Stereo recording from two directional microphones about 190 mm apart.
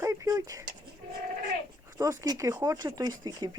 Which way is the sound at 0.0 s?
15° right (ahead or behind).